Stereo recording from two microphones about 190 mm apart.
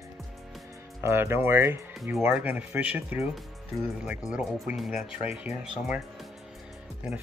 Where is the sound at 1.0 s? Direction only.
15° right (ahead or behind).